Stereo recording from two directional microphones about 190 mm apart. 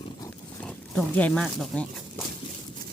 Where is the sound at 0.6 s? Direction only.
5° left (ahead or behind).